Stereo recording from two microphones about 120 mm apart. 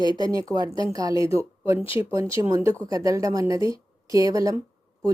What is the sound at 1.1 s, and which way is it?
Speech, 50° left (ahead or behind).